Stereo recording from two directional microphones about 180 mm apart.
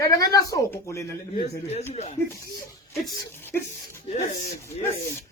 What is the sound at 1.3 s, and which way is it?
Speech, 35° left (ahead or behind).